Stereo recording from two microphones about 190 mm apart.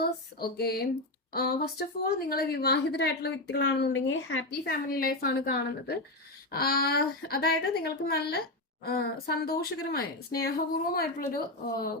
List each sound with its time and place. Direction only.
0.0 s a sound: 55° left (ahead or behind)
1.3 s a woman's voice: 55° left (ahead or behind); by 4.7 s 75° left (ahead or behind)
4.7 s a woman's voice: 50° left (ahead or behind)